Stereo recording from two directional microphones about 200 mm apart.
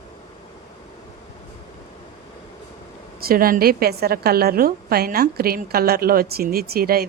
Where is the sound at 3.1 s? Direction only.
50° right (ahead or behind).